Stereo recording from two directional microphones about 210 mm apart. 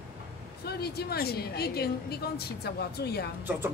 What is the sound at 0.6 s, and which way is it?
A woman's voice, 50° left (ahead or behind).